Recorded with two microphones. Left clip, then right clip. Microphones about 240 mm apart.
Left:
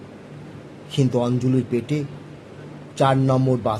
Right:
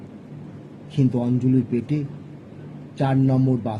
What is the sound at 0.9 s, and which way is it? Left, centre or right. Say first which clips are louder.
Speech: left 2 dB; left.